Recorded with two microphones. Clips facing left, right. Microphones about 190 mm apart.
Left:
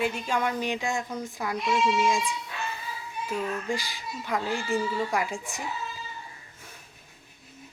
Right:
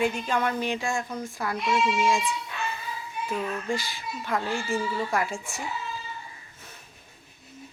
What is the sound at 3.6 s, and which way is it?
Speech, 15° left (ahead or behind).